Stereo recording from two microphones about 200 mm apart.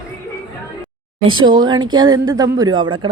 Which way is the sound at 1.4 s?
20° right (ahead or behind).